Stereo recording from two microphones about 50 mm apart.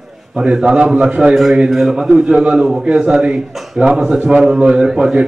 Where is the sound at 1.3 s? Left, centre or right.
Centre.